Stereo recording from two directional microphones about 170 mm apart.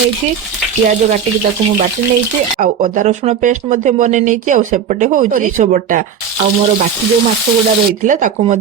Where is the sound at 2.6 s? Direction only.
50° right (ahead or behind).